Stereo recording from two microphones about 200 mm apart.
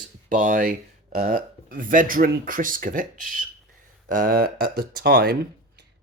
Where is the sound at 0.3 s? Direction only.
40° right (ahead or behind).